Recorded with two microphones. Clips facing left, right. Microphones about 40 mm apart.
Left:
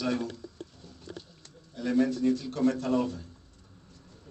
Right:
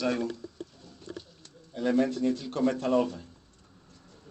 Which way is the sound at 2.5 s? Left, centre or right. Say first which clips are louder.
Right 1 dB; right.